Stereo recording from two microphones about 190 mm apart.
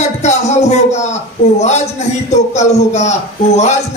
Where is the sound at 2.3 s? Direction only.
35° left (ahead or behind).